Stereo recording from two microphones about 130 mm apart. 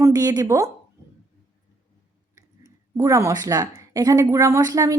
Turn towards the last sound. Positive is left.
turn(degrees=-25)  # may be behind; listen again after turning